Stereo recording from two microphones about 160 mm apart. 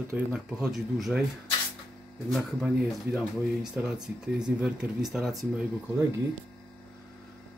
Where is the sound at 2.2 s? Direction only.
Centre (ahead or behind).